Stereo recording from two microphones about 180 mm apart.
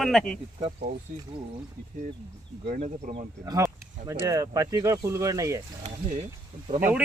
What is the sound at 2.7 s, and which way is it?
Speech, 30° right (ahead or behind).